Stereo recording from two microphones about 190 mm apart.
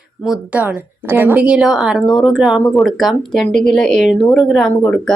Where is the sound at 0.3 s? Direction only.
5° right (ahead or behind).